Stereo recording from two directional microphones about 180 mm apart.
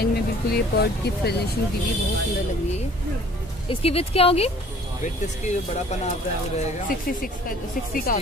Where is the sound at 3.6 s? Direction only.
30° left (ahead or behind).